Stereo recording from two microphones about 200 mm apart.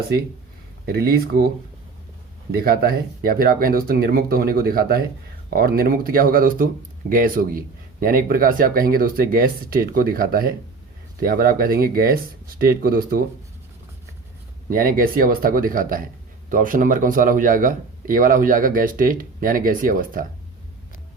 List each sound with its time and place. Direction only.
0.9 s a man's voice: 50° right (ahead or behind)
2.5 s a man's voice: 50° right (ahead or behind)
14.7 s a man's voice: 45° right (ahead or behind)